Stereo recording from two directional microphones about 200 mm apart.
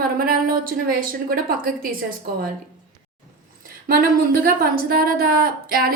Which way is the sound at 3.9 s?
45° right (ahead or behind).